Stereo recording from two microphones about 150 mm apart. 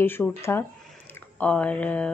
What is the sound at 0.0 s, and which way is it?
A woman's voice, 15° left (ahead or behind).